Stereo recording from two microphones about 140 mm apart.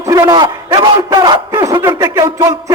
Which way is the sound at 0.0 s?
25° right (ahead or behind).